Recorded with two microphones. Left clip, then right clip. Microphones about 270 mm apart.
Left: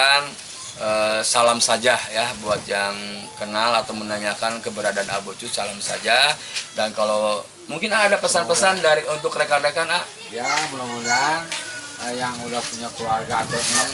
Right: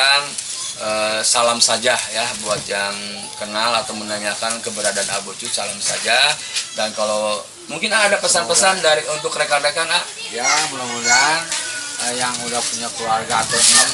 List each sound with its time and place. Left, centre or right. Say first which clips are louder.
0.0 s sizzle: right 2 dB; centre
0.9 s speech: right 1 dB; centre
6.9 s speech: even; left
7.8 s speech: right 2 dB; centre